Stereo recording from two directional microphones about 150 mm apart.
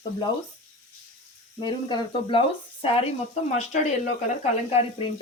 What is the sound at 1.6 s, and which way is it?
A woman's voice, 30° left (ahead or behind).